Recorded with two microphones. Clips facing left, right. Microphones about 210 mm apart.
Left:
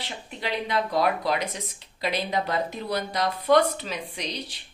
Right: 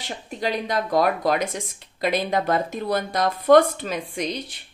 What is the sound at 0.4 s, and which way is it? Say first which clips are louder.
Speech: right 3 dB; 45° right (ahead or behind).